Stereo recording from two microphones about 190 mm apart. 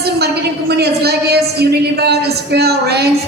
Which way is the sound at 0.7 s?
60° right (ahead or behind).